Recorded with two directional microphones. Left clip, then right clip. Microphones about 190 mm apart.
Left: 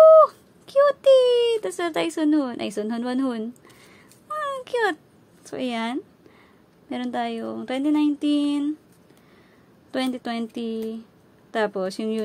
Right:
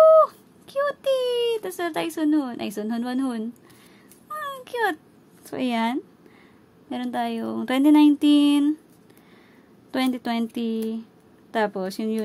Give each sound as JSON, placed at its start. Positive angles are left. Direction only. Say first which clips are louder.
{"t": 0.0, "sound": "a sound", "louder": "left 3 dB", "side_deg": 5}
{"t": 5.4, "sound": "speech", "louder": "right 3 dB", "side_deg": -10}
{"t": 6.9, "sound": "speech", "louder": "even", "side_deg": 0}
{"t": 7.5, "sound": "speech", "louder": "right 7 dB", "side_deg": -15}
{"t": 9.8, "sound": "speech", "louder": "right 2 dB", "side_deg": -10}